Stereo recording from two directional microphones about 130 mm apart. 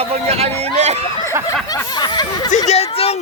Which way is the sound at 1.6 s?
30° left (ahead or behind).